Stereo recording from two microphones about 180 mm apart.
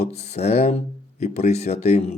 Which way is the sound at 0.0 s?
35° left (ahead or behind).